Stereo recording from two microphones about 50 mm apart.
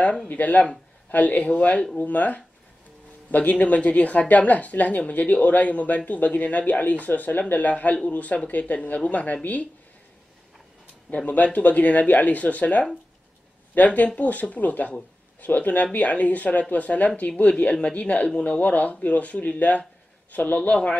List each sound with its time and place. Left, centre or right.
0.3 s a woman's voice: left
11.2 s a woman's voice: left